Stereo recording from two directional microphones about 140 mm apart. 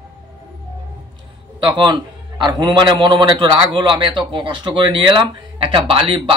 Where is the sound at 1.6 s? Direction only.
35° right (ahead or behind).